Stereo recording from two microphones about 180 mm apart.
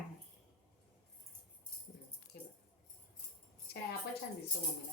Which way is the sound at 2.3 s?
65° left (ahead or behind).